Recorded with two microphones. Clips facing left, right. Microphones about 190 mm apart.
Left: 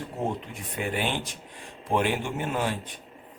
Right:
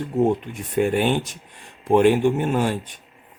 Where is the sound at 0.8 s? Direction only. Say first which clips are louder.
Right 10 dB; 50° right (ahead or behind).